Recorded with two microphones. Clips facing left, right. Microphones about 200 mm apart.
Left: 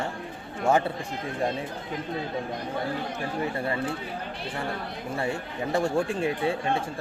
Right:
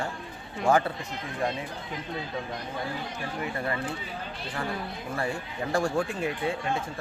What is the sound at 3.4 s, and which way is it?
Speech, 30° left (ahead or behind).